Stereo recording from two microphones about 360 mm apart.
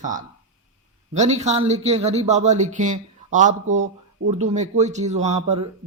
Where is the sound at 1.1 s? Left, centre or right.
Centre.